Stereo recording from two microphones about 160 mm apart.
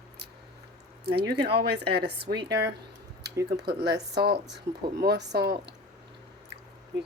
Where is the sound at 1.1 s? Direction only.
90° right.